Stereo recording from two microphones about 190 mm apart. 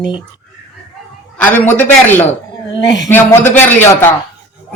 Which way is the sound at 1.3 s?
10° left (ahead or behind).